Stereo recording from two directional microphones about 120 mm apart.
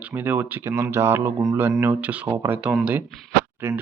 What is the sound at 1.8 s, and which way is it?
Speech, 15° right (ahead or behind).